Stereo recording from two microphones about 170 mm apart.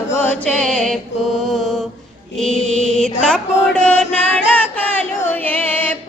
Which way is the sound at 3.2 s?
5° left (ahead or behind).